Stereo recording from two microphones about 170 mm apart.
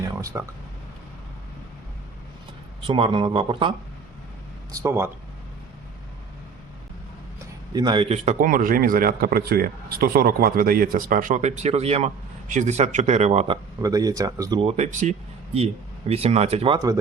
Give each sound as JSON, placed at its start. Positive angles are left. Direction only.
{"t": 0.3, "sound": "speech", "side_deg": -20}
{"t": 2.8, "sound": "speech", "side_deg": -30}
{"t": 4.7, "sound": "speech", "side_deg": -15}
{"t": 7.7, "sound": "speech", "side_deg": -25}
{"t": 8.1, "sound": "speech", "side_deg": -45}
{"t": 13.8, "sound": "speech", "side_deg": -20}
{"t": 14.6, "sound": "speech", "side_deg": -40}